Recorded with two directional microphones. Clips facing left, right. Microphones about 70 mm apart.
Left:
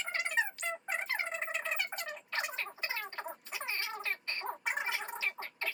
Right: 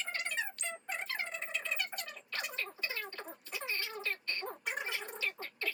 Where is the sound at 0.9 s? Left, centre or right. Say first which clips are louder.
Left 2 dB; left.